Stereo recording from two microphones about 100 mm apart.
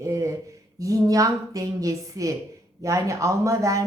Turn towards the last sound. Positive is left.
turn(degrees=-30)  # may be behind; listen again after turning